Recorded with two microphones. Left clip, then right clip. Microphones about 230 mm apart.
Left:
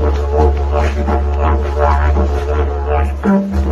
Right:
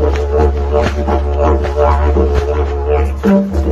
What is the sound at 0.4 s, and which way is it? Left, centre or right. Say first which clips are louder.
Didgeridoo: right 1 dB; right.